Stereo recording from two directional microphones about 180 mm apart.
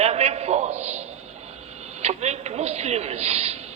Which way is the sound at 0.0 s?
35° right (ahead or behind).